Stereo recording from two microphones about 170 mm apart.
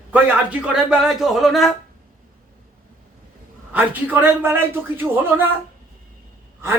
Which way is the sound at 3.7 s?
10° right (ahead or behind).